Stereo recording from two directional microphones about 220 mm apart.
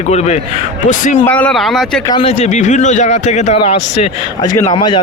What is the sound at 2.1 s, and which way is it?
A man's voice, 25° left (ahead or behind).